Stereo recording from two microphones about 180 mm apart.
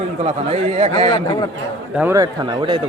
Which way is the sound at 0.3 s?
35° right (ahead or behind).